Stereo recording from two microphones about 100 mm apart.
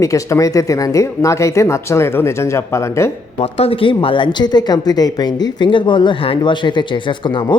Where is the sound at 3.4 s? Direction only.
80° left.